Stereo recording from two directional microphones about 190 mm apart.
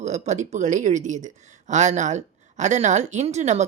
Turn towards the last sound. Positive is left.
turn(degrees=-35)  # may be behind; listen again after turning